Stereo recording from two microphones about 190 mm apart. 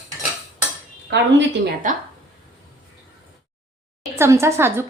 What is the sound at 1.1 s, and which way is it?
Speech, 65° right (ahead or behind).